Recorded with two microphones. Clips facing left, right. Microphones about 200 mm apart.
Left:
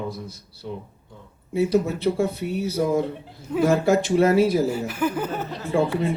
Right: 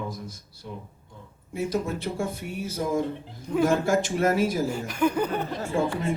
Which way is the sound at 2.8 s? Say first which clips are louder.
Left 5 dB; 55° left (ahead or behind).